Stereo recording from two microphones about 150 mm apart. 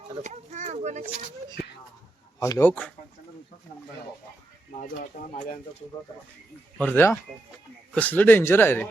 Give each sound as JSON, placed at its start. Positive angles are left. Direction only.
{"t": 0.2, "sound": "speech", "side_deg": -55}
{"t": 2.4, "sound": "speech", "side_deg": 20}
{"t": 4.9, "sound": "speech", "side_deg": 60}
{"t": 6.7, "sound": "speech", "side_deg": 15}